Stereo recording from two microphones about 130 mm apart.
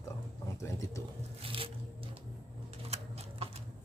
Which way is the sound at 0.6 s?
20° left (ahead or behind).